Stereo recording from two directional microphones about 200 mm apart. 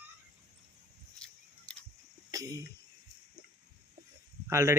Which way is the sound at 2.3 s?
15° right (ahead or behind).